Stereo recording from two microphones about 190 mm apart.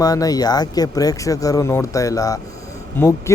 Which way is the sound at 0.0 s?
20° left (ahead or behind).